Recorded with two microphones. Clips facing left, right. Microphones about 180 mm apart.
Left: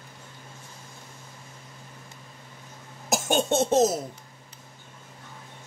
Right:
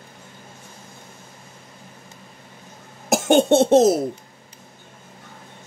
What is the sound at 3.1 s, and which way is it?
Speech, 60° right (ahead or behind).